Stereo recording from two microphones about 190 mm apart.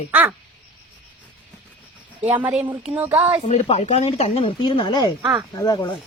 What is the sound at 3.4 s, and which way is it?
Speech, 35° left (ahead or behind).